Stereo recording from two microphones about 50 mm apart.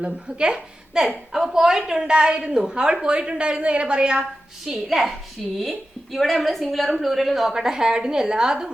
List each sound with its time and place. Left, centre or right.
0.0 s a woman's voice: centre
4.6 s a woman's voice: centre